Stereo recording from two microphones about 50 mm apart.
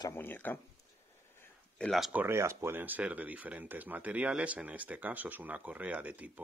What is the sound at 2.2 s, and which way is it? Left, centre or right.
Speech, right.